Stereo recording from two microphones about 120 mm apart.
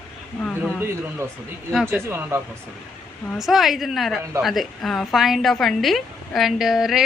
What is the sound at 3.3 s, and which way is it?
A woman's voice, centre (ahead or behind).